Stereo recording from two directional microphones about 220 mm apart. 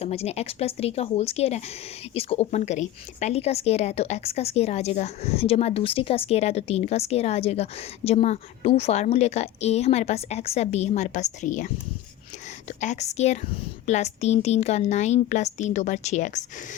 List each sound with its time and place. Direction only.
0.0 s a woman's voice: 30° left (ahead or behind)